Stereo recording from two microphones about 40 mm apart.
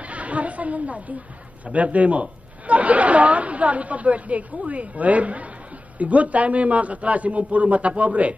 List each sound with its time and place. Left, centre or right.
0.0 s chatter: right
1.7 s speech: right